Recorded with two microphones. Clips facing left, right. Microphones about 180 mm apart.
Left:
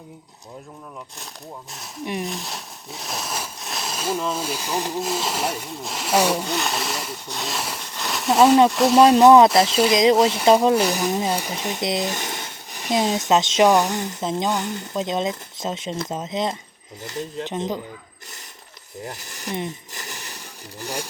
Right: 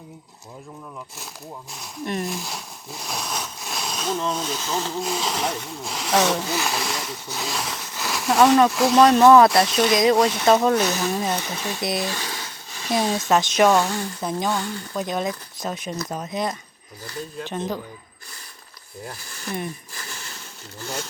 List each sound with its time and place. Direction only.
2.2 s speech: centre (ahead or behind)
9.0 s speech: 15° left (ahead or behind)
10.2 s speech: 5° left (ahead or behind)
19.0 s a sound: 20° left (ahead or behind)
20.8 s speech: 15° left (ahead or behind)